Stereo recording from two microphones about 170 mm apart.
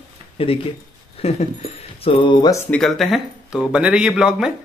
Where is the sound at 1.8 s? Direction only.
35° left (ahead or behind).